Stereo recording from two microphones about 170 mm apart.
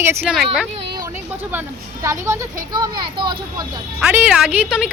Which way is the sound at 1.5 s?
15° right (ahead or behind).